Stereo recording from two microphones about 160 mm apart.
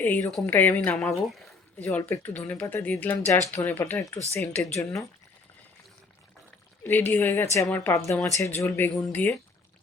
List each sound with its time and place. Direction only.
0.0 s speech: 10° left (ahead or behind)
6.8 s speech: 10° left (ahead or behind)